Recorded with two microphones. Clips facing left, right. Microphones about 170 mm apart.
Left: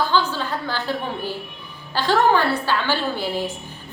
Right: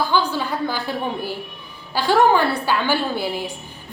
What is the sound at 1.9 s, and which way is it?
A woman's voice, 10° right (ahead or behind).